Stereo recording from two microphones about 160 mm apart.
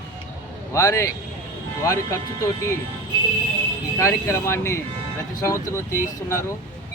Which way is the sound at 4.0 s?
15° left (ahead or behind).